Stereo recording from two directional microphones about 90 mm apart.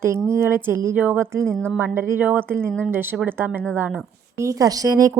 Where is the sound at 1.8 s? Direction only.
25° right (ahead or behind).